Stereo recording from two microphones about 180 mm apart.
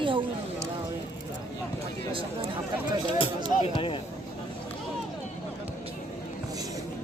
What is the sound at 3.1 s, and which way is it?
Speech, 30° left (ahead or behind).